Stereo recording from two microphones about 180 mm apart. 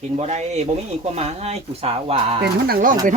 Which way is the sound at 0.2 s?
40° right (ahead or behind).